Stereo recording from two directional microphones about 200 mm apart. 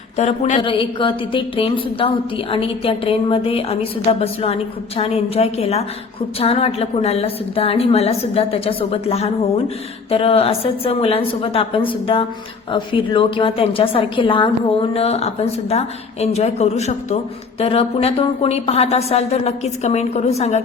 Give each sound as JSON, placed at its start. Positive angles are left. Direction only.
{"t": 0.2, "sound": "a woman's voice", "side_deg": 35}